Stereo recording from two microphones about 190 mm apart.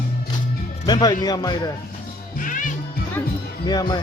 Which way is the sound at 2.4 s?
45° left (ahead or behind).